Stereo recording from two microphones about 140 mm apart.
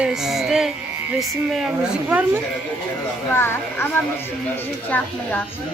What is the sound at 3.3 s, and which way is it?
Speech, 15° left (ahead or behind).